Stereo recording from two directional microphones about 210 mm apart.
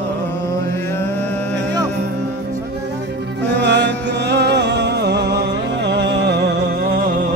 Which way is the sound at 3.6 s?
55° right (ahead or behind).